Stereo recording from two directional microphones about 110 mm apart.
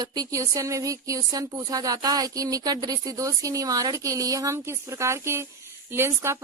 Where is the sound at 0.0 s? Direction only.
35° right (ahead or behind).